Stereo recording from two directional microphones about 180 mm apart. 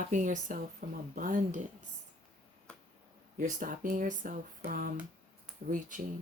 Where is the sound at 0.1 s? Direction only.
45° right (ahead or behind).